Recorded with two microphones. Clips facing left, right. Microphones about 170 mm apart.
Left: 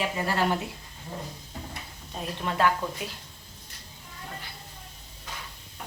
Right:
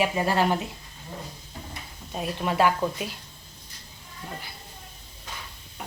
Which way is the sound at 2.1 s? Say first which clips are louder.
Right 4 dB; 10° right (ahead or behind).